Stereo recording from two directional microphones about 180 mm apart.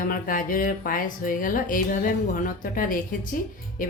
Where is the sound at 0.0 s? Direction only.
50° left (ahead or behind).